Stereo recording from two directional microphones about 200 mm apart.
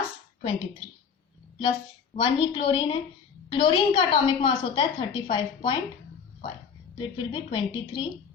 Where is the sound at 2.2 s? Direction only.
25° left (ahead or behind).